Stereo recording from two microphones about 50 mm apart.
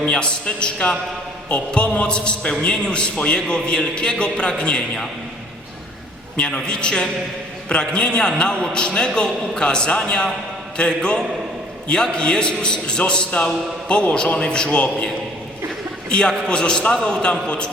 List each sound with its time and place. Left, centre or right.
0.0 s a man's voice: left
6.3 s a man's voice: centre